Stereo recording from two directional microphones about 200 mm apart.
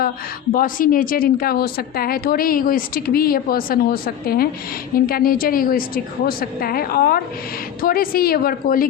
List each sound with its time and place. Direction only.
0.5 s a woman's voice: 45° left (ahead or behind)